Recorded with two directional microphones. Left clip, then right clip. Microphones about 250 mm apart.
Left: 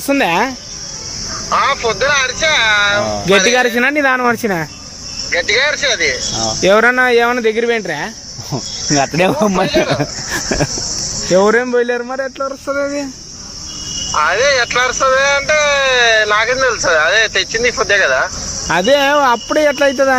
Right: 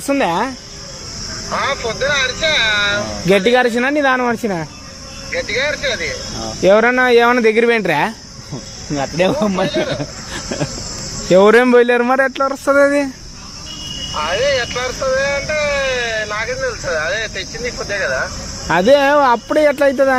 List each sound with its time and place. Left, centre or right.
0.1 s speech: centre
1.5 s speech: left
3.2 s speech: centre
5.3 s speech: left
6.6 s speech: centre; by 8.1 s right
9.0 s speech: left
11.3 s speech: centre
14.2 s speech: left
18.7 s speech: centre